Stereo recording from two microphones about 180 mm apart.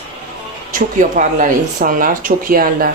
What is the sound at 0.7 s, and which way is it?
Speech, 45° right (ahead or behind).